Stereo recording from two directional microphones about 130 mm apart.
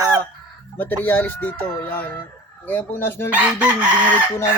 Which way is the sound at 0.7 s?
15° left (ahead or behind).